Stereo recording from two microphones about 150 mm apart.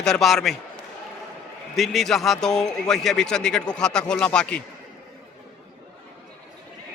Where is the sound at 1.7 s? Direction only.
Centre (ahead or behind).